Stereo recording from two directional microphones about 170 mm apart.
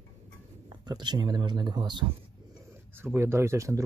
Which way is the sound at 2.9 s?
15° right (ahead or behind).